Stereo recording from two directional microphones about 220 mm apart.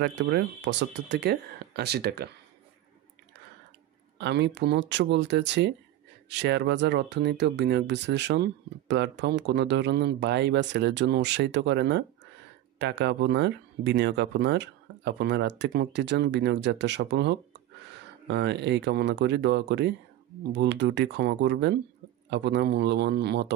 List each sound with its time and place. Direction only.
0.0 s speech: 50° right (ahead or behind)
4.2 s speech: 50° right (ahead or behind)